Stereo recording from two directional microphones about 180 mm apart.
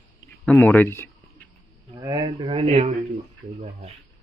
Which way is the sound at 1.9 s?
20° right (ahead or behind).